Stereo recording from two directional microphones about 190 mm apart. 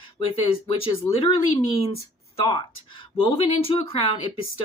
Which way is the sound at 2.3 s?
25° left (ahead or behind).